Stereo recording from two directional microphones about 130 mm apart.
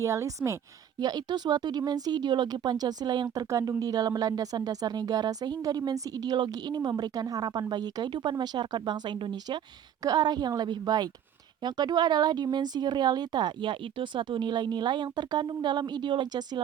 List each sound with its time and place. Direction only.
0.0 s speech: 25° right (ahead or behind)